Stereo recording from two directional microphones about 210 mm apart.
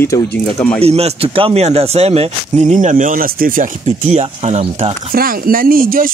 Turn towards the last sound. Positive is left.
turn(degrees=-40)  # may be behind; listen again after turning